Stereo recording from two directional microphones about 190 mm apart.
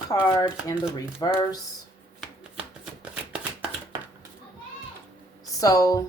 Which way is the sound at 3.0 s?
5° right (ahead or behind).